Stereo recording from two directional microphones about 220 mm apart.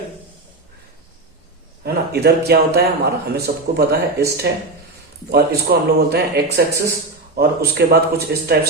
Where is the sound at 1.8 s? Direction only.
45° right (ahead or behind).